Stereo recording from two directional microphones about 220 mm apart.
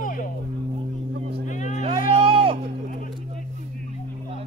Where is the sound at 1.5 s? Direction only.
35° left (ahead or behind).